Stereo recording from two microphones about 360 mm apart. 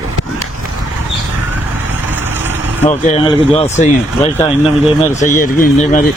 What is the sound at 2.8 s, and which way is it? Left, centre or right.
Speech, centre.